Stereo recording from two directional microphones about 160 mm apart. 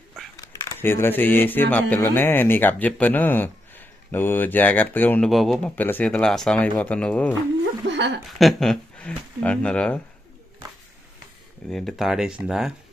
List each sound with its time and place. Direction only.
0.3 s speech: 20° left (ahead or behind)
5.3 s speech: centre (ahead or behind)
5.7 s speech: 10° left (ahead or behind)
7.9 s a sound: 90° right
8.4 s speech: centre (ahead or behind)
11.7 s speech: centre (ahead or behind)